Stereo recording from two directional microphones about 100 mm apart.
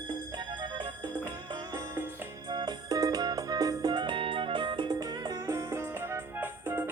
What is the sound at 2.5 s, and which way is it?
Music, 40° right (ahead or behind).